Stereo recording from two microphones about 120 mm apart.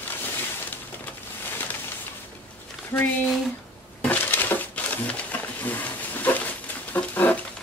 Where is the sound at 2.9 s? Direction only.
20° left (ahead or behind).